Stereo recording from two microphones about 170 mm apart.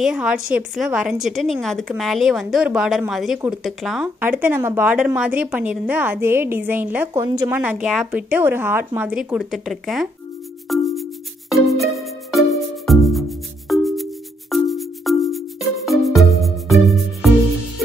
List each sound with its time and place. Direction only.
0.0 s a woman's voice: 5° right (ahead or behind)
10.7 s music: centre (ahead or behind)